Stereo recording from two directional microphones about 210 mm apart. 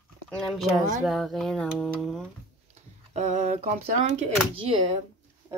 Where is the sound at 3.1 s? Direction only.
35° right (ahead or behind).